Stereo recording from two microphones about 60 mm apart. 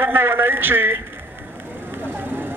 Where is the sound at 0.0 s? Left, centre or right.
Right.